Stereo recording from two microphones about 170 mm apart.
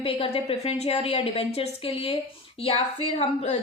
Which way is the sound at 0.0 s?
35° left (ahead or behind).